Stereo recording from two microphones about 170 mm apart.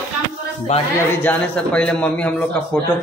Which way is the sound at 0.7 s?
40° left (ahead or behind).